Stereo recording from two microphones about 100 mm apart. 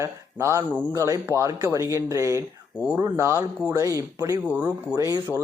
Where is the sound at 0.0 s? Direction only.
30° right (ahead or behind).